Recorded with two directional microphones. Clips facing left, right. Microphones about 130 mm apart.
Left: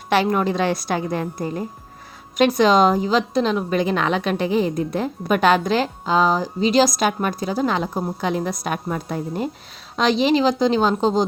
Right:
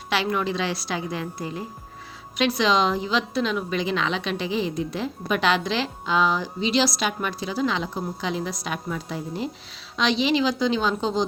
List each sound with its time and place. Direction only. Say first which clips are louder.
0.1 s a woman's voice: left 6 dB; 45° left (ahead or behind)